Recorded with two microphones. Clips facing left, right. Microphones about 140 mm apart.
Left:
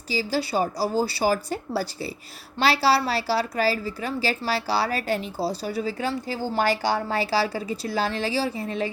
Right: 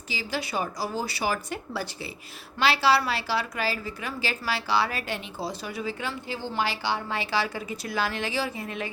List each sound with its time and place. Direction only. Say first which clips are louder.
0.1 s a woman's voice: left 6 dB; 35° left (ahead or behind)